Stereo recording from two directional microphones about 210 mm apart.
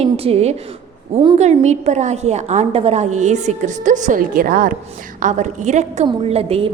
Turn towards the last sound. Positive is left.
turn(degrees=-30)  # may be behind; listen again after turning